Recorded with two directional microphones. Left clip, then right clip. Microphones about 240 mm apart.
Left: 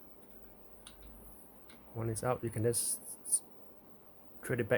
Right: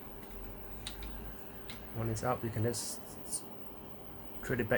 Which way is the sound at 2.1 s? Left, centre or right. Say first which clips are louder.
Even; left.